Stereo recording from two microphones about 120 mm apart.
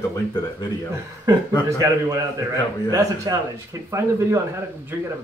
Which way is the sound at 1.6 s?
25° right (ahead or behind).